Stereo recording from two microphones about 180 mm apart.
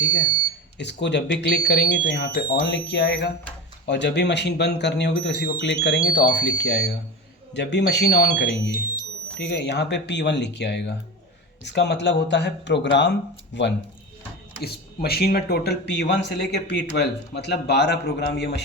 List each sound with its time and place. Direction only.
0.8 s a man's voice: 75° left (ahead or behind)
14.6 s a man's voice: 60° left (ahead or behind)